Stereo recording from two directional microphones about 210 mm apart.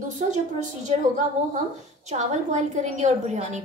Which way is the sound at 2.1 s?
35° right (ahead or behind).